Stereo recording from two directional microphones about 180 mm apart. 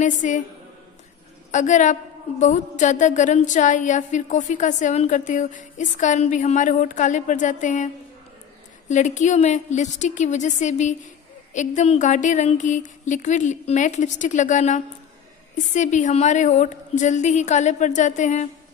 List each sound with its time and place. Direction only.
0.0 s a woman's voice: 45° left (ahead or behind)
1.5 s a woman's voice: 40° left (ahead or behind)